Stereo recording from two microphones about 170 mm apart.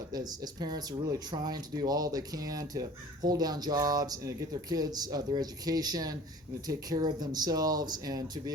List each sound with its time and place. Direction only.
0.1 s speech: 25° right (ahead or behind)